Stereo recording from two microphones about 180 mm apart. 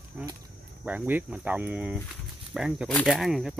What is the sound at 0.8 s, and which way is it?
Speech, 10° right (ahead or behind).